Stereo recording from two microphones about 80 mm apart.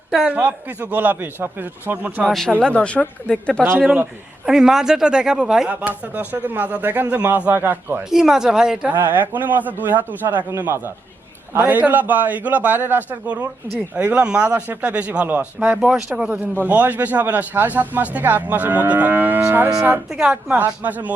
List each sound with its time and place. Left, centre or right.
0.3 s a man's voice: right
2.6 s speech: centre
4.4 s speech: centre
5.8 s a man's voice: right
8.1 s speech: centre
8.9 s a man's voice: right
15.8 s a man's voice: centre; by 19.7 s right
20.1 s speech: centre